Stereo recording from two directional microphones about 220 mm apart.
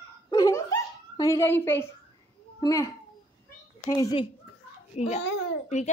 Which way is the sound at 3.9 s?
15° left (ahead or behind).